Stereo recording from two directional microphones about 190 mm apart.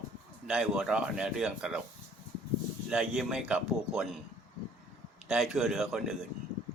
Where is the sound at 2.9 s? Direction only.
5° right (ahead or behind).